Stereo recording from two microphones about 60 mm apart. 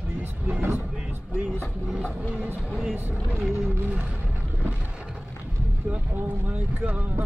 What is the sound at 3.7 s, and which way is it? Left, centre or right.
Speech, right.